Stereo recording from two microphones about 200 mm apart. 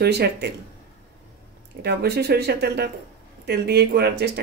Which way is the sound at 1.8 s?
55° right (ahead or behind).